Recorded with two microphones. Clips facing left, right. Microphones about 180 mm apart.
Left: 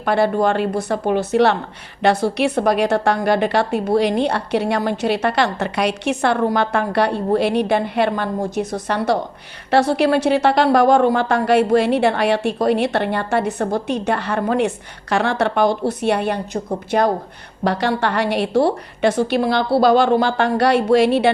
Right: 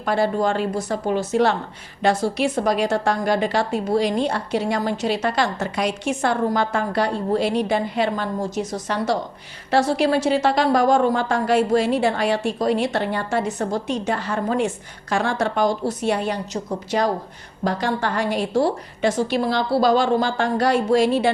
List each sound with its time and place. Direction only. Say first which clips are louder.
0.0 s a woman's voice: left 3 dB; 65° left (ahead or behind)
17.6 s a woman's voice: left 4 dB; 70° left (ahead or behind)